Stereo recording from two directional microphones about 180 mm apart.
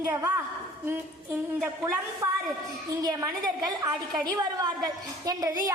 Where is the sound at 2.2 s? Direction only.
15° right (ahead or behind).